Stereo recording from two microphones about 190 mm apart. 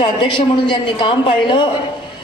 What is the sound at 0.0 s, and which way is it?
Speech, 25° left (ahead or behind).